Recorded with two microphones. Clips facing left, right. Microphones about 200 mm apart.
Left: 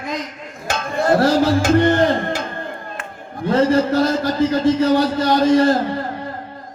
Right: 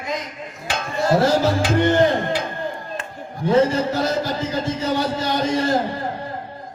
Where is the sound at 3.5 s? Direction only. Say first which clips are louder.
Left 2 dB; 55° left (ahead or behind).